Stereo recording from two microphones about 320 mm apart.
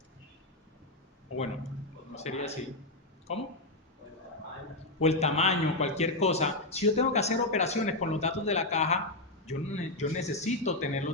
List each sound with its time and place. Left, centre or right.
2.1 s a man's voice: centre
4.9 s a man's voice: centre